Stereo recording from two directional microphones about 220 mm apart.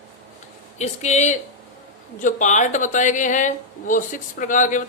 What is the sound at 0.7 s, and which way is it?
Speech, 30° left (ahead or behind).